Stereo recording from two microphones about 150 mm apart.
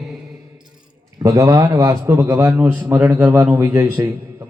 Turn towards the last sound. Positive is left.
turn(degrees=-15)  # may be behind; listen again after turning